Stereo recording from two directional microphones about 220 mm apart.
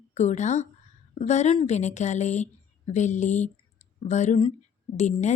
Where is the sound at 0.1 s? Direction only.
30° left (ahead or behind).